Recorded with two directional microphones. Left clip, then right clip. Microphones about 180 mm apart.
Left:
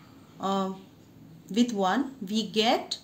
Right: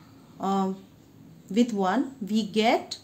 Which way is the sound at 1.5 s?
50° right (ahead or behind).